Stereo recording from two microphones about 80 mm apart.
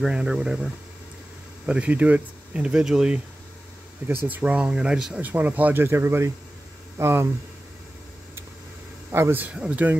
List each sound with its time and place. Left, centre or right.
0.0 s speech: centre
1.7 s speech: centre
4.3 s speech: centre
5.2 s speech: right
9.1 s speech: right
9.5 s speech: centre